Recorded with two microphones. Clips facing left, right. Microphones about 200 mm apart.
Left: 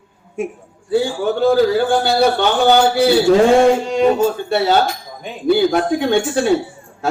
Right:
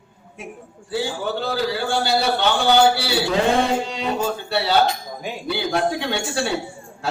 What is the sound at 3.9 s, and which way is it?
A man's voice, 45° left (ahead or behind).